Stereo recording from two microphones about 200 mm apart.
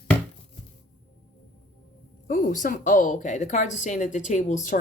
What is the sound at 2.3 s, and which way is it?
Speech, 40° left (ahead or behind).